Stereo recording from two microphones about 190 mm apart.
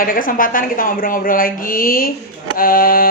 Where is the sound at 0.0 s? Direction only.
45° left (ahead or behind).